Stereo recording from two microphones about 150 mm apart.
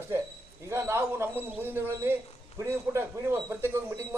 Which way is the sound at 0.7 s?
15° right (ahead or behind).